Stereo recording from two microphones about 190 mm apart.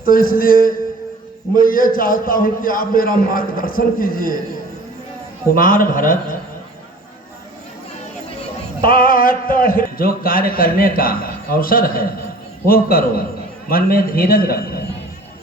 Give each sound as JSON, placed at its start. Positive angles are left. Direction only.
{"t": 0.0, "sound": "a man's voice", "side_deg": 50}
{"t": 5.5, "sound": "a man's voice", "side_deg": 45}
{"t": 8.8, "sound": "a man's voice", "side_deg": 50}